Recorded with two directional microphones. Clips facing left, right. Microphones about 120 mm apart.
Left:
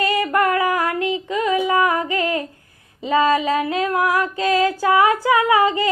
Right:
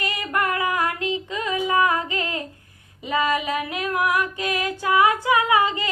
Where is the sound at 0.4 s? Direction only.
25° right (ahead or behind).